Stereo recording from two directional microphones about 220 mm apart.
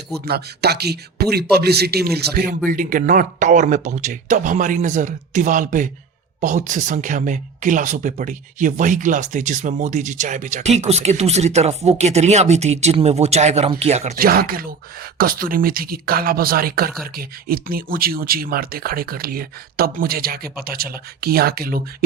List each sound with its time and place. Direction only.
0.3 s speech: 45° right (ahead or behind)